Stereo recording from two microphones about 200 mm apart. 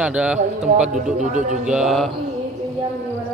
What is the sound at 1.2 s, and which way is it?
Speech, 35° right (ahead or behind).